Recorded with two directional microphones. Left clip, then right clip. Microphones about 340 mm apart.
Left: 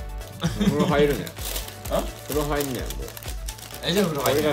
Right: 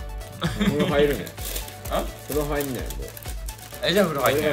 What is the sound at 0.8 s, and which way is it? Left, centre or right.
Speech, centre.